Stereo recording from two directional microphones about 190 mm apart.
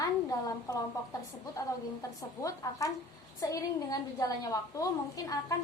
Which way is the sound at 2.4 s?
15° left (ahead or behind).